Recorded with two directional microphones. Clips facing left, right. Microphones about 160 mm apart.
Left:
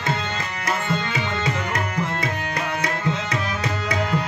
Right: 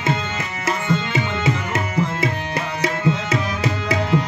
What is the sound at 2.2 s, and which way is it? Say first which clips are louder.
Tabla: right 3 dB; 25° right (ahead or behind).